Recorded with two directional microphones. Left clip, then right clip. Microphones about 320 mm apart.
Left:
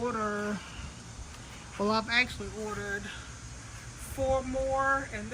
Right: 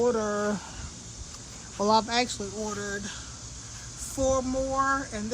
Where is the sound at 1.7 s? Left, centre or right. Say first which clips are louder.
Right 4 dB; centre.